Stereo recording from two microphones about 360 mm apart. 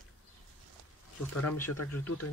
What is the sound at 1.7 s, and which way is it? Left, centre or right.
Speech, left.